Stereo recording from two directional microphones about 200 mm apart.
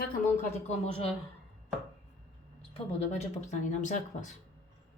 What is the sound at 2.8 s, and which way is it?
Speech, 35° left (ahead or behind).